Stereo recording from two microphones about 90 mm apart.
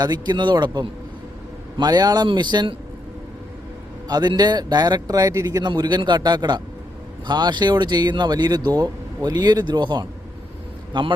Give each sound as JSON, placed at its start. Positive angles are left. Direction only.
{"t": 0.0, "sound": "speech", "side_deg": -55}
{"t": 4.1, "sound": "speech", "side_deg": -50}